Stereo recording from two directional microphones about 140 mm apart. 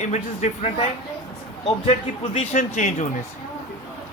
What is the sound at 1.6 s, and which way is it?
Speech, 50° left (ahead or behind).